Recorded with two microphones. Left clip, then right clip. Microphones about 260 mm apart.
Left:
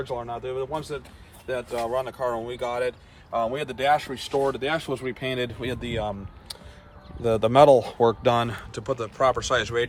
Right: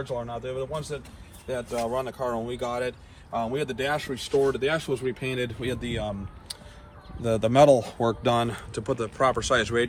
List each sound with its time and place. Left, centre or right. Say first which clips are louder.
0.0 s speech: left 1 dB; left